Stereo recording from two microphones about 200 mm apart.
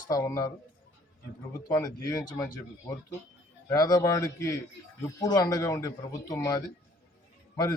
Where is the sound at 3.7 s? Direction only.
20° left (ahead or behind).